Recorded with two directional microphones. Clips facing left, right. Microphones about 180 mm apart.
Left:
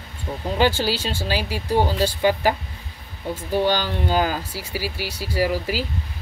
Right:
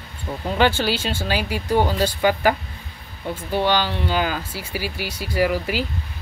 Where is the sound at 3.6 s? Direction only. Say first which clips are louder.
Right 1 dB; 40° left (ahead or behind).